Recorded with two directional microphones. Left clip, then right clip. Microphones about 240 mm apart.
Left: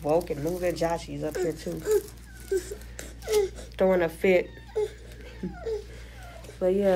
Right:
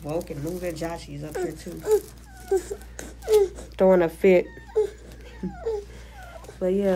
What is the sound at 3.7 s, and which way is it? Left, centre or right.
Speech, centre.